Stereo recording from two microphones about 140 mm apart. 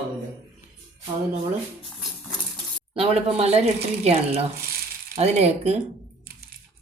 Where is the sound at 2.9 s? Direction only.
45° right (ahead or behind).